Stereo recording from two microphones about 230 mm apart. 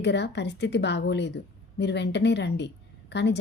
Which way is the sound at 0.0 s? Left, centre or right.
Left.